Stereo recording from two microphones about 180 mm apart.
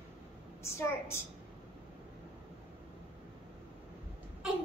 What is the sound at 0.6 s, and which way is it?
Speech, 15° left (ahead or behind).